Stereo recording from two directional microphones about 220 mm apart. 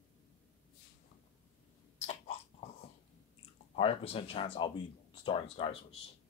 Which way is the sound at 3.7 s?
25° left (ahead or behind).